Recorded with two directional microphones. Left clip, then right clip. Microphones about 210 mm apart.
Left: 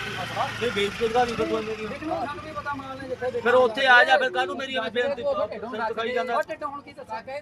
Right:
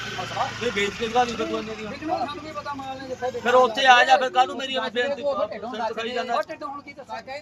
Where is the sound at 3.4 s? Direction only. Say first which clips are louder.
Right 2 dB; centre (ahead or behind).